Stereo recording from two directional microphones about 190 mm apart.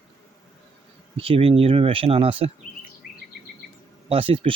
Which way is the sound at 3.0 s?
50° left (ahead or behind).